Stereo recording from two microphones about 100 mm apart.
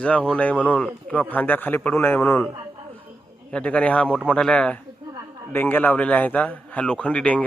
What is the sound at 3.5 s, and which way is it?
A man's voice, 15° left (ahead or behind).